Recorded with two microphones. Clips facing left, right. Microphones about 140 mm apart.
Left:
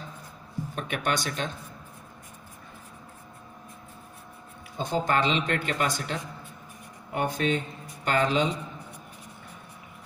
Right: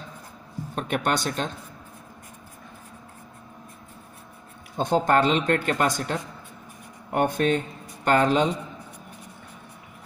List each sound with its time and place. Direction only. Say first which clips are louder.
0.7 s speech: right 4 dB; 45° right (ahead or behind)
4.7 s speech: right 5 dB; 55° right (ahead or behind)